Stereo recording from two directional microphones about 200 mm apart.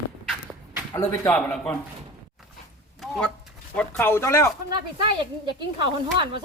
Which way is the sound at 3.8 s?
10° left (ahead or behind).